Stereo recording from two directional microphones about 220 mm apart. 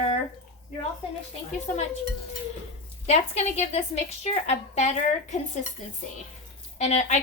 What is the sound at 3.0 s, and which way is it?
A woman's voice, 30° left (ahead or behind).